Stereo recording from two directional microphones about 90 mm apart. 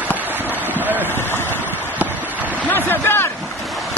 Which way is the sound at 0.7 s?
20° right (ahead or behind).